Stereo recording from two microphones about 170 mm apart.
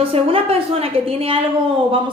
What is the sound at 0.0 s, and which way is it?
A woman's voice, 35° right (ahead or behind).